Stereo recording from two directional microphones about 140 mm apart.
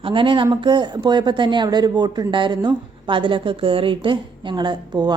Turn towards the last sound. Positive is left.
turn(degrees=-30)  # may be behind; listen again after turning